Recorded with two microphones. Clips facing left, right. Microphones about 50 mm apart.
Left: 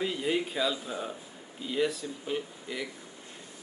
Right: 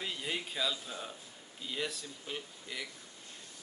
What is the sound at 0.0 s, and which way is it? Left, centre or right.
Speech, centre.